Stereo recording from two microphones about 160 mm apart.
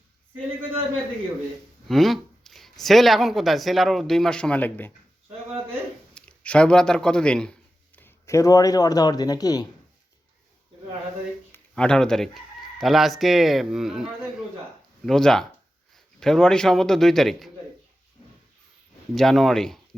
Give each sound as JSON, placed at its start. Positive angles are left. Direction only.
{"t": 1.9, "sound": "speech", "side_deg": 0}
{"t": 6.1, "sound": "speech", "side_deg": 5}
{"t": 7.9, "sound": "speech", "side_deg": 15}
{"t": 11.5, "sound": "speech", "side_deg": 5}
{"t": 19.1, "sound": "speech", "side_deg": 0}